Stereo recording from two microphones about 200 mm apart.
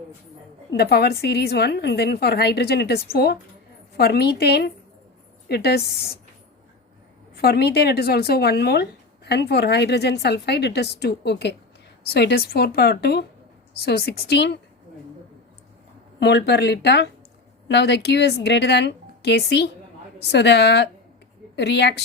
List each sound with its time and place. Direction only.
0.7 s a woman's voice: 55° left (ahead or behind)
7.3 s a woman's voice: 55° left (ahead or behind)
16.2 s speech: 60° left (ahead or behind)